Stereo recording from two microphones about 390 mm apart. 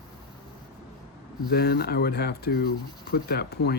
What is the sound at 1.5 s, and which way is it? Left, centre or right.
Speech, left.